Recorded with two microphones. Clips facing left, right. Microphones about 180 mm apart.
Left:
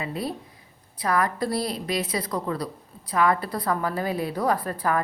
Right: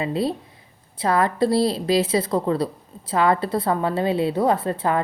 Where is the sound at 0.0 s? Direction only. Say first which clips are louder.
Right 7 dB; 25° right (ahead or behind).